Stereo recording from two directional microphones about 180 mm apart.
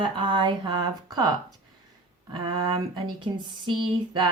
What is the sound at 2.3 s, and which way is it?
Speech, 30° right (ahead or behind).